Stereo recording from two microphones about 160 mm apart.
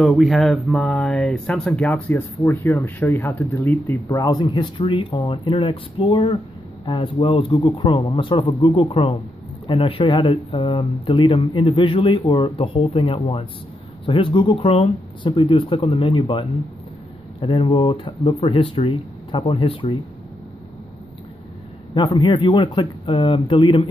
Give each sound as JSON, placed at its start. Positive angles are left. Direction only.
{"t": 0.0, "sound": "speech", "side_deg": 0}
{"t": 21.9, "sound": "speech", "side_deg": 30}